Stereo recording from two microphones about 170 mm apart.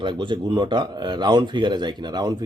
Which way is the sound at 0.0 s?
30° right (ahead or behind).